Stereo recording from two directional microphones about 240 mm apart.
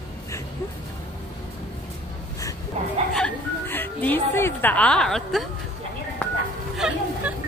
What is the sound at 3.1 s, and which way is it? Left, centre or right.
Music, centre.